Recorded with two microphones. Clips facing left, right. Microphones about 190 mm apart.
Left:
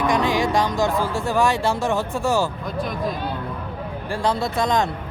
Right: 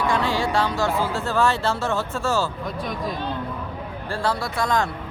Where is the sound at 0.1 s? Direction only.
15° left (ahead or behind).